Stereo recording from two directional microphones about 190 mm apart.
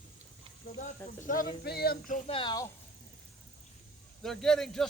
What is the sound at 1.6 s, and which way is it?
Child singing, 55° left (ahead or behind).